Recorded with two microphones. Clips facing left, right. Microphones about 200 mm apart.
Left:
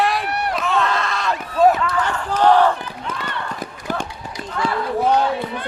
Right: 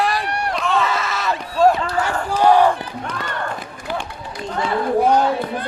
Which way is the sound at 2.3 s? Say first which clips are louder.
Right 1 dB; 10° right (ahead or behind).